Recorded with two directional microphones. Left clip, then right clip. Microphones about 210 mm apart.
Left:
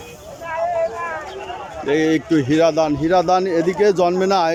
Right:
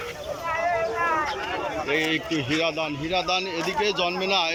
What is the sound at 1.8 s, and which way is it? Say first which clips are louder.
Speech: left 10 dB; 25° left (ahead or behind).